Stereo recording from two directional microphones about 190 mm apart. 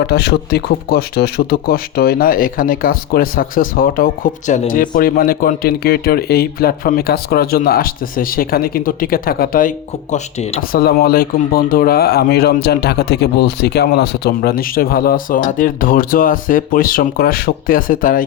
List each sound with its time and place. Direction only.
0.0 s speech: 60° left (ahead or behind)